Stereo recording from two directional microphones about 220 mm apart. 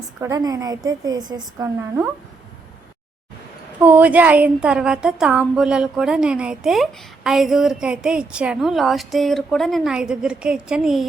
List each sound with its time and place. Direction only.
0.2 s a woman's voice: 15° right (ahead or behind)
3.8 s a woman's voice: 5° right (ahead or behind)